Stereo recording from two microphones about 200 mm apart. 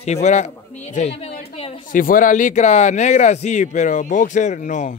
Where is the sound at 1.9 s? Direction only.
45° left (ahead or behind).